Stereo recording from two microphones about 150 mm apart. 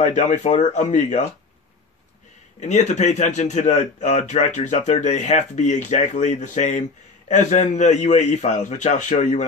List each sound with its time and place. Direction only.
0.0 s a man's voice: 55° left (ahead or behind)
2.6 s a man's voice: 50° left (ahead or behind)